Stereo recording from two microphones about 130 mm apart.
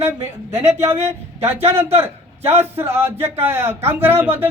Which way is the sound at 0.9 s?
55° right (ahead or behind).